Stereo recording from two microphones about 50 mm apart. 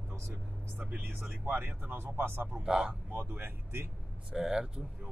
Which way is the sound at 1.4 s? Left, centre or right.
Right.